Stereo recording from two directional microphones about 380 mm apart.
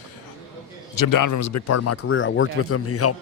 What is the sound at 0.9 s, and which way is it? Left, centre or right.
Speech, left.